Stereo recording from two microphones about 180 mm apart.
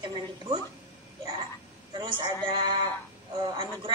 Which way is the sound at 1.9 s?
25° right (ahead or behind).